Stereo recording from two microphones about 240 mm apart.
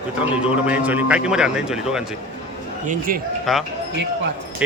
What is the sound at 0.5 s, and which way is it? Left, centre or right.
A man's voice, centre.